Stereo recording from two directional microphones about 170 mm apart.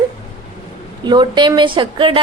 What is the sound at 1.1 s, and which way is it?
A woman's voice, 25° right (ahead or behind).